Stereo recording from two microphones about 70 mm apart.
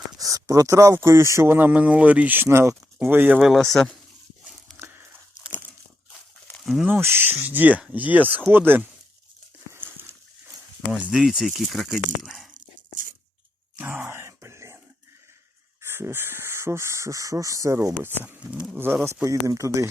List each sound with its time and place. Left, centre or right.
0.2 s speech: right
1.5 s speech: right
2.5 s speech: right
3.1 s speech: right
3.6 s speech: centre
4.8 s a sound: right
6.6 s a sound: centre
7.0 s speech: right
10.9 s speech: centre
13.7 s a sound: right
15.8 s speech: right
19.0 s speech: right